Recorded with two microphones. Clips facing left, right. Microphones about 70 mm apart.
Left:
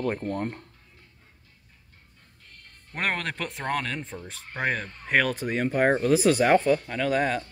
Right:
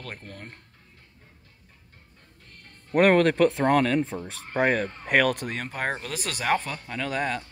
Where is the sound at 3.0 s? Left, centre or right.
Centre.